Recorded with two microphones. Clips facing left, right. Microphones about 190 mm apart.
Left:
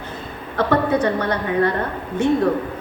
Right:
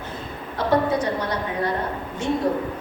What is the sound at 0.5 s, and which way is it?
A woman's voice, 60° left (ahead or behind).